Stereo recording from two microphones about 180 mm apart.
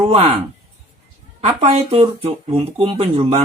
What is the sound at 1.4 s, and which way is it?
Speech, 35° right (ahead or behind).